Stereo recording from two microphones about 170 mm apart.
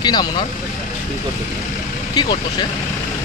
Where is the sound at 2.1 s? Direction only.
25° left (ahead or behind).